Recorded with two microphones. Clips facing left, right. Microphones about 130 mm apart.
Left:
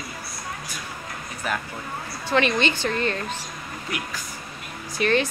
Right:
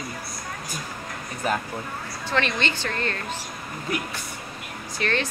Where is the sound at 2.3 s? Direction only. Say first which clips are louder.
Left 4 dB; 10° left (ahead or behind).